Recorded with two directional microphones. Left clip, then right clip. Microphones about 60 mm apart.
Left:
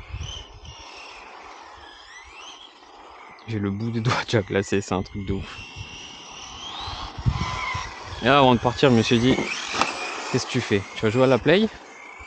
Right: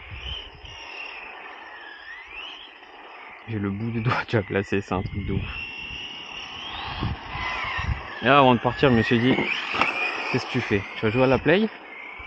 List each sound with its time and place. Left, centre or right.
3.4 s speech: left
5.3 s vehicle: left
8.2 s speech: left
8.5 s speech: left
9.4 s frog: left
11.0 s speech: left